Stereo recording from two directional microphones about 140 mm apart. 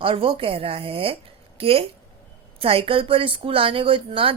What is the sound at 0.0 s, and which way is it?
A woman's voice, 40° right (ahead or behind).